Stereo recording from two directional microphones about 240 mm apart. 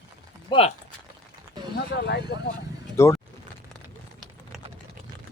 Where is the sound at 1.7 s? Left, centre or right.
Left.